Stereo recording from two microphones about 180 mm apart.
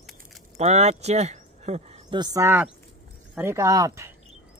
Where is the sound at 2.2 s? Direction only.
20° right (ahead or behind).